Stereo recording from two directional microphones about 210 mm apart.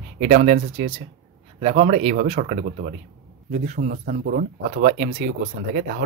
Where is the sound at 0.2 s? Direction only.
35° right (ahead or behind).